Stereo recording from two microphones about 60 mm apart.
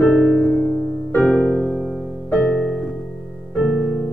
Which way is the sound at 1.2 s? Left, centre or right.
Left.